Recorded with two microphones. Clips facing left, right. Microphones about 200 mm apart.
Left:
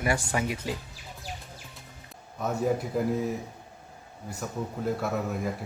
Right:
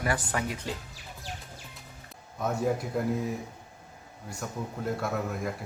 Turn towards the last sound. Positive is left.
turn(degrees=0)  # may be behind; listen again after turning